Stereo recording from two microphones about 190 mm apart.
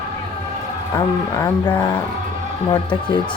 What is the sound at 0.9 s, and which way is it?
Speech, 20° left (ahead or behind).